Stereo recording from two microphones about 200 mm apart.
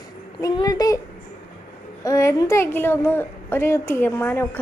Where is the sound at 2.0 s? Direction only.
15° left (ahead or behind).